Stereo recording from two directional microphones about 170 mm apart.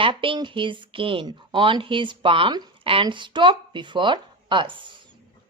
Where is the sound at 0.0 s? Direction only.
30° right (ahead or behind).